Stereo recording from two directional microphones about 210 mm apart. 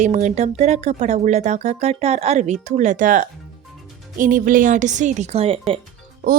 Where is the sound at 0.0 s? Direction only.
35° right (ahead or behind).